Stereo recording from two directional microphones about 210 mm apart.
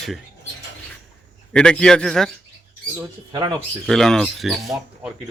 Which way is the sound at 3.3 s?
20° right (ahead or behind).